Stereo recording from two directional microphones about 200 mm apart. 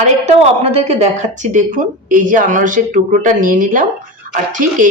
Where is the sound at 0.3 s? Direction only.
30° right (ahead or behind).